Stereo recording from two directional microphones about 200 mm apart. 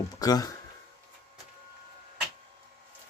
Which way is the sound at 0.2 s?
20° left (ahead or behind).